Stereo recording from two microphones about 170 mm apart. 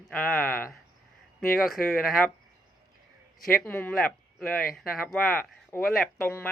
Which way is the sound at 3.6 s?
10° left (ahead or behind).